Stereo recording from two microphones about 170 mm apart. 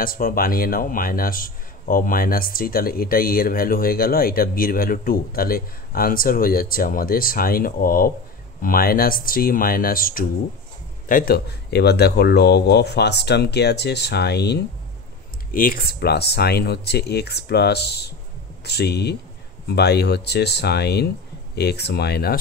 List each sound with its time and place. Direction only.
0.0 s a man's voice: 55° left (ahead or behind); by 14.6 s 75° left (ahead or behind)
15.5 s speech: 60° left (ahead or behind)